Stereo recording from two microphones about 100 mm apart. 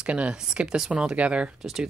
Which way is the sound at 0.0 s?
10° right (ahead or behind).